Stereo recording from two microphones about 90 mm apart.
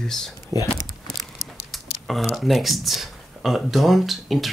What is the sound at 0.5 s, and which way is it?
Speech, 35° right (ahead or behind).